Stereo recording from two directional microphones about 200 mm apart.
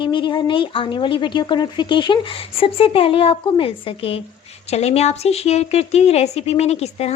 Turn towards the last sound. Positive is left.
turn(degrees=30)  # may be behind; listen again after turning